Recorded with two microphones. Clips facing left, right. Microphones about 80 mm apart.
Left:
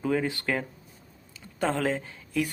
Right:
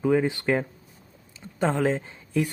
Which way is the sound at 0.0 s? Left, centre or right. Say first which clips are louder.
Right 5 dB; centre.